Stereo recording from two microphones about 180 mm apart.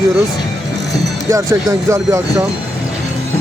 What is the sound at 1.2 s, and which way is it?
Speech, 15° right (ahead or behind).